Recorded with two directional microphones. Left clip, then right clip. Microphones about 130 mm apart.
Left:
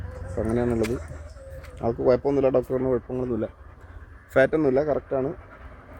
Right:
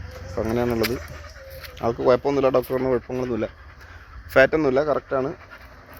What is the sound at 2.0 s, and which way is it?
Speech, 5° left (ahead or behind).